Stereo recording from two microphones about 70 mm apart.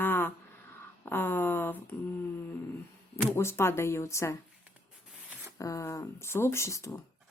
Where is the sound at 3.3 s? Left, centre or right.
Left.